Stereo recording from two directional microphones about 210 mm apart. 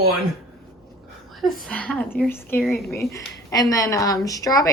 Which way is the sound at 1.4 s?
Centre (ahead or behind).